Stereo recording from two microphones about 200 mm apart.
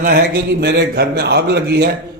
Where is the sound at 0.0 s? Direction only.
50° right (ahead or behind).